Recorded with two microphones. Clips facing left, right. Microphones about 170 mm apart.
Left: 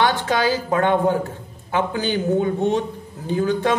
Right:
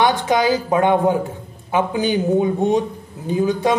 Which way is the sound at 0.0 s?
15° right (ahead or behind).